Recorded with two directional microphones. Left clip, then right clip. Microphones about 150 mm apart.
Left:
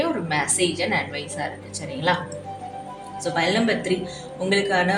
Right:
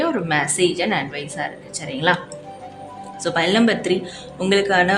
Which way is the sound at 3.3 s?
45° right (ahead or behind).